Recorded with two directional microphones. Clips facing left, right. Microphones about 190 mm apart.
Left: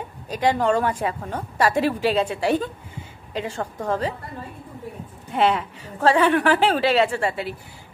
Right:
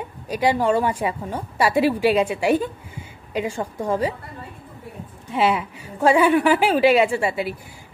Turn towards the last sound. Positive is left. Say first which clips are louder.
# right 2 dB
turn(degrees=-10)  # may be behind; listen again after turning